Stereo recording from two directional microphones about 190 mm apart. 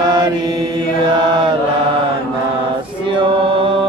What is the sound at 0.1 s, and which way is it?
Mantra, 20° right (ahead or behind).